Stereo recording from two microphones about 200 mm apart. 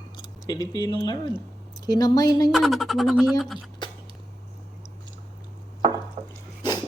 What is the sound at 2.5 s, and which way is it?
Speech, centre (ahead or behind).